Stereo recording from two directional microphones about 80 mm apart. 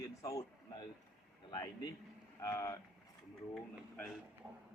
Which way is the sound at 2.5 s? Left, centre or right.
Left.